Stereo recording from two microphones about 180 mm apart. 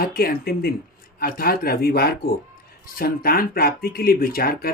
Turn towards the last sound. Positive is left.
turn(degrees=55)  # may be behind; listen again after turning